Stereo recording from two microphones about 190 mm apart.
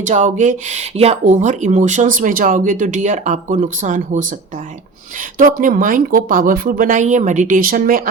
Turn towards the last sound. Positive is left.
turn(degrees=-50)  # may be behind; listen again after turning